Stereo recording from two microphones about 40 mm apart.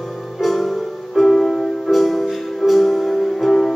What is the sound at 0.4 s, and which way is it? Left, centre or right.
Music, centre.